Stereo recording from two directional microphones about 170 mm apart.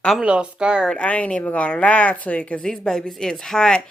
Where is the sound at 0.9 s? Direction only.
10° left (ahead or behind).